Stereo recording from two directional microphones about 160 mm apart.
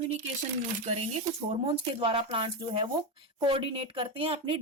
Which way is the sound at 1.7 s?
35° right (ahead or behind).